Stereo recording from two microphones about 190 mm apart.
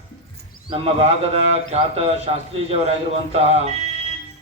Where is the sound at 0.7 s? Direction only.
30° right (ahead or behind).